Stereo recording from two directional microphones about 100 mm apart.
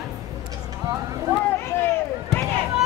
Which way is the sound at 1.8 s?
25° left (ahead or behind).